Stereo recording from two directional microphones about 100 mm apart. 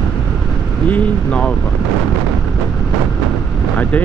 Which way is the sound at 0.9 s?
10° left (ahead or behind).